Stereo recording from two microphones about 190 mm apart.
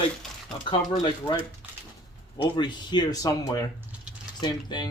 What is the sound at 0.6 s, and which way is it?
Speech, 25° left (ahead or behind).